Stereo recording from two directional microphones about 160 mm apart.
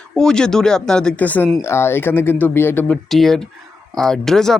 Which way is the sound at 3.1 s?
Centre (ahead or behind).